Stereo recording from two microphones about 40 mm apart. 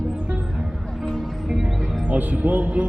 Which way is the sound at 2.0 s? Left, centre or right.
Right.